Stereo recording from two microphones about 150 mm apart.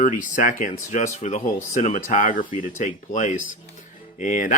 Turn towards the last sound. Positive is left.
turn(degrees=60)  # may be behind; listen again after turning